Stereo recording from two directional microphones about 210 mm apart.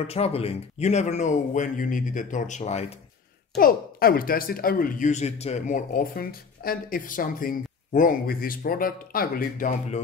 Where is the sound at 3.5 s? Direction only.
45° left (ahead or behind).